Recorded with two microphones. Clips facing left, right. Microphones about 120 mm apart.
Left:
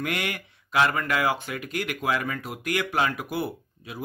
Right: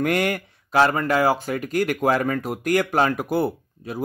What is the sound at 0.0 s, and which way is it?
Speech, 45° right (ahead or behind).